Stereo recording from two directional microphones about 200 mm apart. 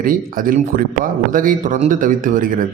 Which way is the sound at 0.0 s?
45° right (ahead or behind).